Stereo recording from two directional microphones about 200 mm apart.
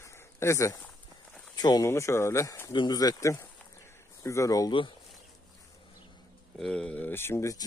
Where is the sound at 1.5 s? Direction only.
20° left (ahead or behind).